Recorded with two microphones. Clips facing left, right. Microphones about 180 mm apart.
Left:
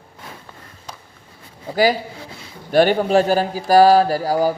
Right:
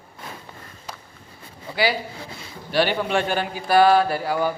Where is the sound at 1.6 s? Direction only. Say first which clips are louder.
Left 6 dB; 45° left (ahead or behind).